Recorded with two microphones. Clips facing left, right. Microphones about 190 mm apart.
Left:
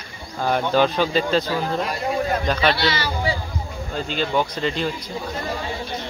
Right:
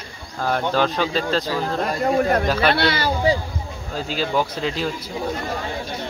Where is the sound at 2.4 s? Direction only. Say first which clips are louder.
Right 1 dB; 5° right (ahead or behind).